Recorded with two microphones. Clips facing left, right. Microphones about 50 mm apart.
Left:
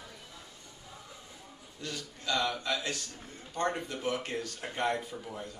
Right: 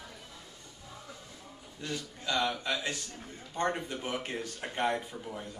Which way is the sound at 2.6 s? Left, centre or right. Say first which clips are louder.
Even; centre.